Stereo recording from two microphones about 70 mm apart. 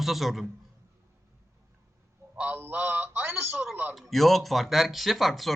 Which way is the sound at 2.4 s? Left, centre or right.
Right.